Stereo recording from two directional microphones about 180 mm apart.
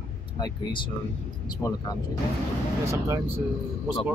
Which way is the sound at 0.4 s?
25° left (ahead or behind).